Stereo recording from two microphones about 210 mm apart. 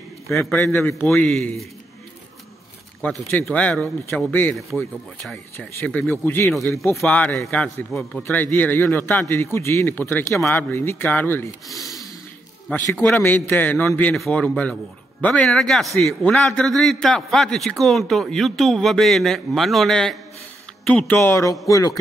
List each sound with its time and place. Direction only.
0.3 s a man's voice: centre (ahead or behind)
3.3 s a man's voice: 5° left (ahead or behind)